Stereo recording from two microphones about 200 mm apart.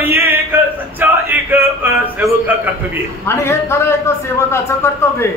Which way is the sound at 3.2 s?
10° left (ahead or behind).